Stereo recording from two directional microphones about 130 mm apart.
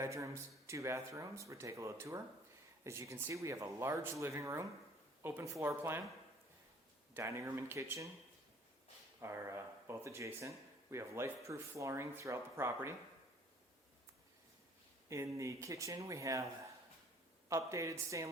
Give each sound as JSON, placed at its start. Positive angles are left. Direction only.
{"t": 0.0, "sound": "speech", "side_deg": -25}
{"t": 7.1, "sound": "speech", "side_deg": -20}
{"t": 9.2, "sound": "speech", "side_deg": -20}
{"t": 15.1, "sound": "speech", "side_deg": -25}
{"t": 17.5, "sound": "speech", "side_deg": -25}